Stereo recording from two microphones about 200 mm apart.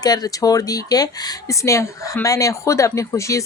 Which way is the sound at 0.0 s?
20° left (ahead or behind).